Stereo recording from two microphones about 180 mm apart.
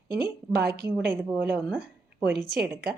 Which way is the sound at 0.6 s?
60° right (ahead or behind).